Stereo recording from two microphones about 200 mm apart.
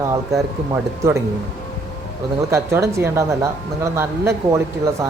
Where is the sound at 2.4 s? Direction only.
15° right (ahead or behind).